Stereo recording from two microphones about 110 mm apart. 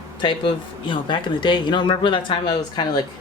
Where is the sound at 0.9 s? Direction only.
45° left (ahead or behind).